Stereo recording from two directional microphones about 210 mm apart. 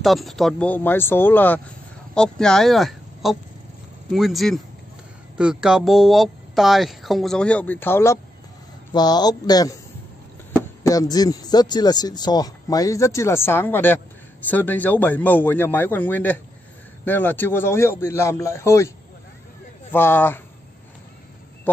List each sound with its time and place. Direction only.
0.0 s a man's voice: centre (ahead or behind); by 9.8 s 20° left (ahead or behind)
10.8 s a man's voice: 15° left (ahead or behind)
19.9 s a man's voice: 10° left (ahead or behind)